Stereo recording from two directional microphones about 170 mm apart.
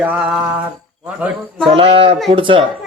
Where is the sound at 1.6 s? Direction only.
35° right (ahead or behind).